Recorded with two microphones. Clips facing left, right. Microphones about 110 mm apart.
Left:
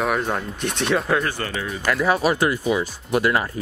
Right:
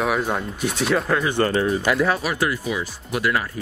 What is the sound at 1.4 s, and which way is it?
Speech, 35° right (ahead or behind).